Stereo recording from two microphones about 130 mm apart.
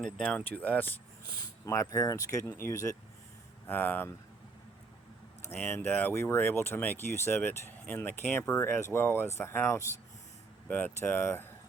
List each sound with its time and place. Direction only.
0.0 s speech: 5° left (ahead or behind)
1.6 s speech: 25° left (ahead or behind)
5.7 s speech: 15° left (ahead or behind)